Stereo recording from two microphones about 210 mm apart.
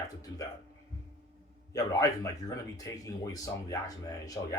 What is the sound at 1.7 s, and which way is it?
Speech, 15° left (ahead or behind).